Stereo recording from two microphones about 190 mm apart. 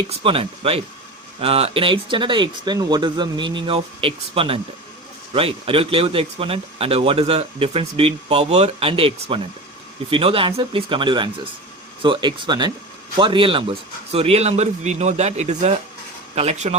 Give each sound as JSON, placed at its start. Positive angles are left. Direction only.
{"t": 0.1, "sound": "a man's voice", "side_deg": -30}